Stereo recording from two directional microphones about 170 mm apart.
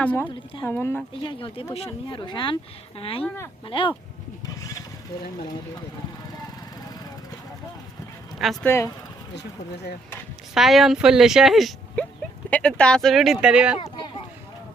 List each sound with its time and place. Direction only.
0.0 s speech: 10° left (ahead or behind)
1.2 s speech: 30° left (ahead or behind)
3.2 s speech: 15° left (ahead or behind)
3.7 s speech: 30° left (ahead or behind)
8.6 s speech: 15° left (ahead or behind)
9.3 s speech: 80° left
10.5 s speech: centre (ahead or behind)